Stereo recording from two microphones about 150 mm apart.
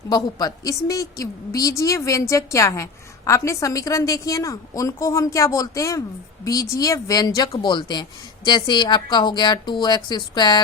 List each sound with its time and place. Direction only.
0.1 s a woman's voice: 25° left (ahead or behind)